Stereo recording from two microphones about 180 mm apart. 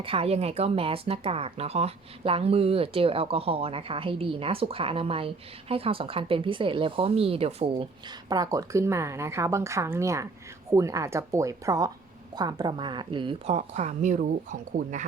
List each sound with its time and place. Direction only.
0.0 s speech: 30° right (ahead or behind)
8.3 s a woman's voice: 20° right (ahead or behind); by 14.9 s 45° right (ahead or behind)